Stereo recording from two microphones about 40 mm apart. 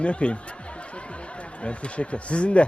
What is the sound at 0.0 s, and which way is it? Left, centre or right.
Speech, left.